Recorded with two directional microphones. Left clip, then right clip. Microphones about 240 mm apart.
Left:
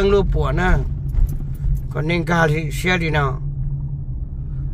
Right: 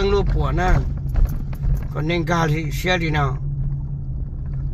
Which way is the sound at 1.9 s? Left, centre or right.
Left.